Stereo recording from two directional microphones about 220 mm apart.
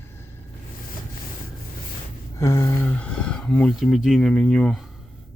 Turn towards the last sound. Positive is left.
turn(degrees=0)  # may be behind; listen again after turning